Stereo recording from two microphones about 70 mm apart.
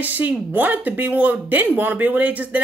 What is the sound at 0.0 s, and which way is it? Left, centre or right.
Speech, right.